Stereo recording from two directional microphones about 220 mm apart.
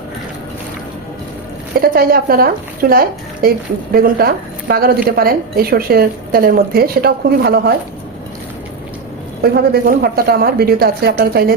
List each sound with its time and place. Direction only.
1.8 s a woman's voice: 40° right (ahead or behind)
9.4 s a woman's voice: 45° right (ahead or behind)